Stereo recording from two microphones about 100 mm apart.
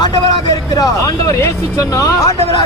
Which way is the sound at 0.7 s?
35° left (ahead or behind).